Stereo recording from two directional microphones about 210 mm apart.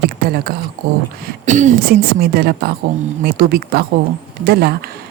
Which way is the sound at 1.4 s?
35° right (ahead or behind).